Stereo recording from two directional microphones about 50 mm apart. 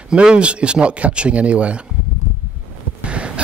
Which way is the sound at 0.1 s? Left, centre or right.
Centre.